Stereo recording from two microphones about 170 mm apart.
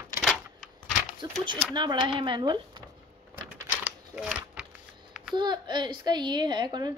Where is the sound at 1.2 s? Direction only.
25° right (ahead or behind).